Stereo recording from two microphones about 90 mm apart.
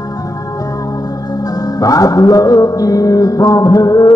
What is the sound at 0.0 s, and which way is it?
Music, 45° left (ahead or behind).